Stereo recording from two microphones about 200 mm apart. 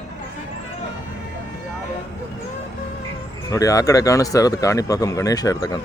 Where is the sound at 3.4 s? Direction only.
15° left (ahead or behind).